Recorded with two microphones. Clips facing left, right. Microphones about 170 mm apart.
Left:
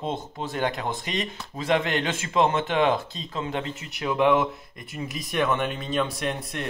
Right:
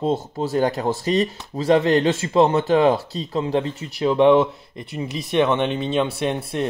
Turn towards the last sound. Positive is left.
turn(degrees=-30)  # may be behind; listen again after turning